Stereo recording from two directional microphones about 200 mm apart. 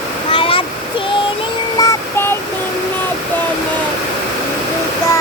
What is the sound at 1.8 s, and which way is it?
Synthetic singing, 15° left (ahead or behind).